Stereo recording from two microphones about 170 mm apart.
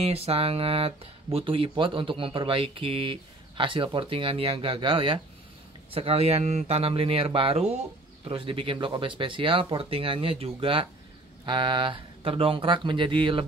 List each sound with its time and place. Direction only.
0.0 s speech: 35° right (ahead or behind)